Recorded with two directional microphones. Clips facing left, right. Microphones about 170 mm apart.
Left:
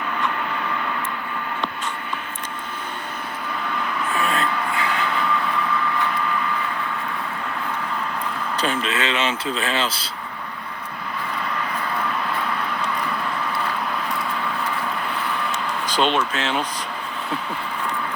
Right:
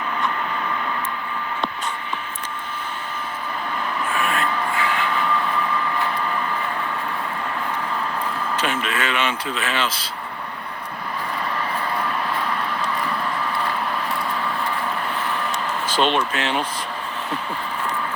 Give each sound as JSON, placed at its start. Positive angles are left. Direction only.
{"t": 4.2, "sound": "a sound", "side_deg": 35}
{"t": 4.8, "sound": "vehicle", "side_deg": 40}
{"t": 8.5, "sound": "speech", "side_deg": 35}
{"t": 15.9, "sound": "speech", "side_deg": 0}